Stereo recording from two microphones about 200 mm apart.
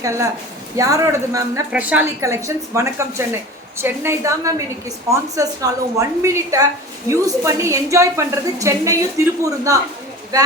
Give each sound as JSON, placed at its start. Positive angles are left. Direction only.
{"t": 0.0, "sound": "a woman's voice", "side_deg": -15}